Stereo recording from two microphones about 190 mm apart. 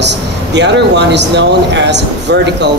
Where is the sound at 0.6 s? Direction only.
65° right (ahead or behind).